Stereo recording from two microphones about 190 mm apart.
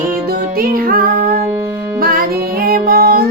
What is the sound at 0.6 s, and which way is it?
Music, 50° right (ahead or behind).